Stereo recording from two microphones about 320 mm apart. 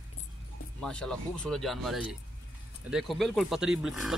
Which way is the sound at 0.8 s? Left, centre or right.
Centre.